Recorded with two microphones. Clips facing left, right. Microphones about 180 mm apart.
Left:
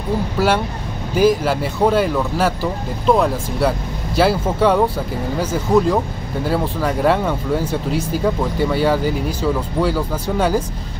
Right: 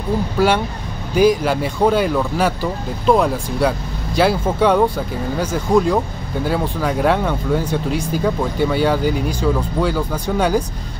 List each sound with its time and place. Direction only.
0.4 s speech: 5° left (ahead or behind)